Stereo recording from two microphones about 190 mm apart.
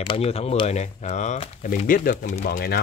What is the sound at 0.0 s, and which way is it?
Speech, 30° left (ahead or behind).